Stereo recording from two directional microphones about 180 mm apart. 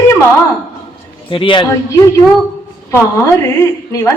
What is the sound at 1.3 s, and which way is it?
Speech, 30° left (ahead or behind).